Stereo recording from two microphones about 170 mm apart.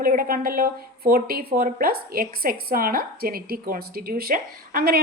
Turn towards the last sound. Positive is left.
turn(degrees=-60)  # may be behind; listen again after turning